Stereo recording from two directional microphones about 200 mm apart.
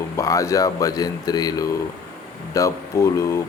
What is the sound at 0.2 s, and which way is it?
Speech, 15° left (ahead or behind).